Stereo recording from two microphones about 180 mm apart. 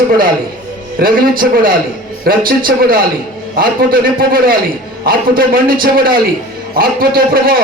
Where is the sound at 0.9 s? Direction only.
55° right (ahead or behind).